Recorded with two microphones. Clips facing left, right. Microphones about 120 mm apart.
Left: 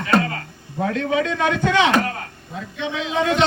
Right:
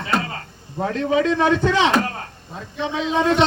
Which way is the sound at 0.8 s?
35° right (ahead or behind).